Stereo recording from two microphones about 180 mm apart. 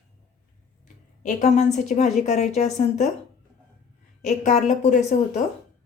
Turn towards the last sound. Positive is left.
turn(degrees=40)  # may be behind; listen again after turning